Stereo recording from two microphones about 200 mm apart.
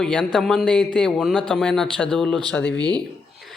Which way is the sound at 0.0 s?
5° left (ahead or behind).